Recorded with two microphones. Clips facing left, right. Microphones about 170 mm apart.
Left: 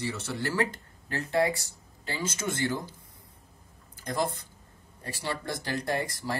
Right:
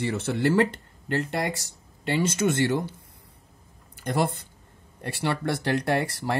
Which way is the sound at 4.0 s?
65° right (ahead or behind).